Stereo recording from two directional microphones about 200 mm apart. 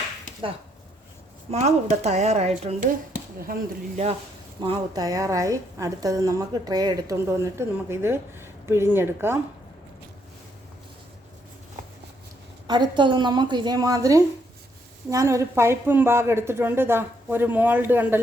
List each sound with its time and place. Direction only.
1.5 s speech: 35° right (ahead or behind)
3.4 s speech: 45° right (ahead or behind)
4.6 s a woman's voice: 20° right (ahead or behind)
12.6 s a woman's voice: 20° right (ahead or behind)